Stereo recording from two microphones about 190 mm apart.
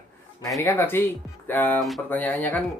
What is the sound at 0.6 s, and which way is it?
A man's voice, 10° left (ahead or behind).